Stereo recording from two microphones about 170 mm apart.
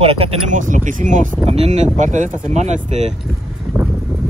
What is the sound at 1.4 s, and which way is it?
Speech, 35° right (ahead or behind).